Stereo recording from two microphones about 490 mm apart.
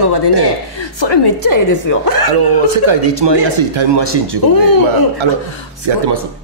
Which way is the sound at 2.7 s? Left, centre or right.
Right.